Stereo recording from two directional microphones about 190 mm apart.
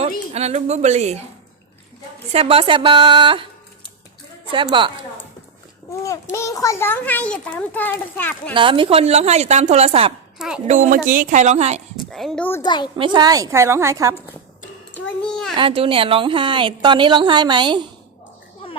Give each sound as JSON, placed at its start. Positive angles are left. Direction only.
{"t": 0.0, "sound": "a woman's voice", "side_deg": -35}
{"t": 2.3, "sound": "a woman's voice", "side_deg": -30}
{"t": 4.5, "sound": "a woman's voice", "side_deg": -25}
{"t": 6.3, "sound": "a child's voice", "side_deg": 15}
{"t": 8.5, "sound": "a woman's voice", "side_deg": -25}
{"t": 10.3, "sound": "a woman's voice", "side_deg": -5}
{"t": 10.7, "sound": "a woman's voice", "side_deg": -40}
{"t": 12.1, "sound": "a child's voice", "side_deg": 5}
{"t": 12.6, "sound": "a child's voice", "side_deg": 25}
{"t": 13.0, "sound": "a woman's voice", "side_deg": -20}
{"t": 14.9, "sound": "a child's voice", "side_deg": 5}
{"t": 15.5, "sound": "a woman's voice", "side_deg": -30}